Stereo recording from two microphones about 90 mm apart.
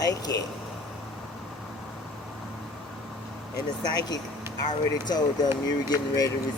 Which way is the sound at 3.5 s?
50° left (ahead or behind).